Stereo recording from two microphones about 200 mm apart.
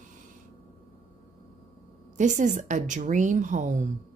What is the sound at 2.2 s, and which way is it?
A woman's voice, 35° right (ahead or behind).